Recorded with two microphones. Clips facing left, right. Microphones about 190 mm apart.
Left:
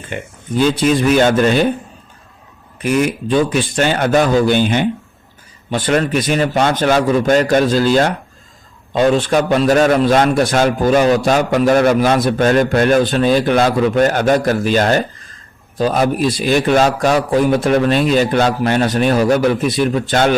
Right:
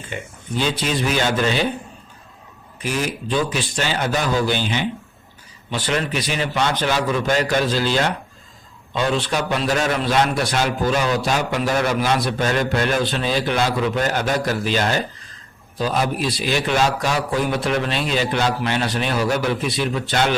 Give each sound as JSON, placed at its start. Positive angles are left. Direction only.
{"t": 0.1, "sound": "a man's voice", "side_deg": 45}
{"t": 2.8, "sound": "a man's voice", "side_deg": 55}